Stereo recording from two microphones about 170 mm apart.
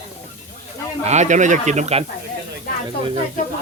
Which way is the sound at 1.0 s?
40° right (ahead or behind).